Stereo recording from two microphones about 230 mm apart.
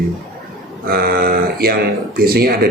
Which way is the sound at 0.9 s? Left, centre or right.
Right.